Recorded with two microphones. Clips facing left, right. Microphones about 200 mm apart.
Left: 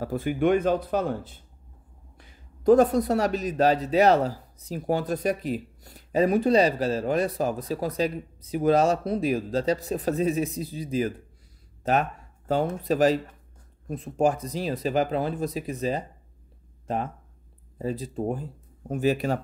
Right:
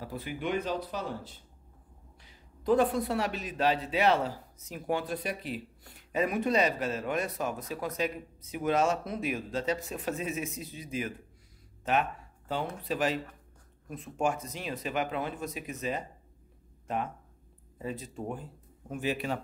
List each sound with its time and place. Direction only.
0.0 s a man's voice: 50° left (ahead or behind)